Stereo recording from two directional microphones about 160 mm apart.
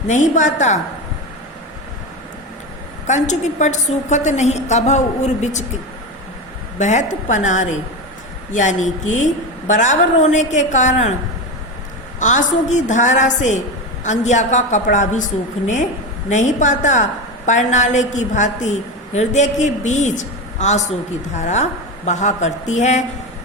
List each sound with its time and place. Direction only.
0.1 s a woman's voice: 50° left (ahead or behind)
3.1 s a woman's voice: 50° left (ahead or behind)
6.7 s a woman's voice: 50° left (ahead or behind)
12.2 s a woman's voice: 50° left (ahead or behind)